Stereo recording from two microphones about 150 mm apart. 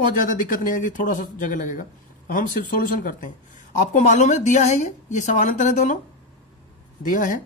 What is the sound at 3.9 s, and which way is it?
A woman's voice, 55° left (ahead or behind).